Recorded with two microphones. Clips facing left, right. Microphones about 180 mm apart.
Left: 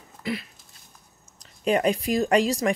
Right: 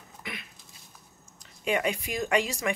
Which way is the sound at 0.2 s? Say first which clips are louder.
Left 12 dB; 30° left (ahead or behind).